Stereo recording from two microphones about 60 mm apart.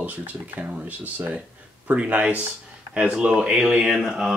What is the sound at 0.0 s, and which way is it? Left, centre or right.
Speech, right.